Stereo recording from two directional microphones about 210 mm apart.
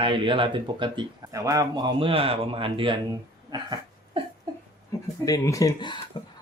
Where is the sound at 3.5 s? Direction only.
20° right (ahead or behind).